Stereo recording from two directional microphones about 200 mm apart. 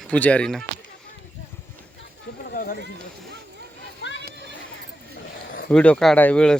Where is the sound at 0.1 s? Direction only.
5° left (ahead or behind).